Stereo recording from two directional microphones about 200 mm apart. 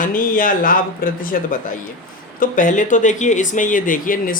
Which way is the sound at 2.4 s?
40° left (ahead or behind).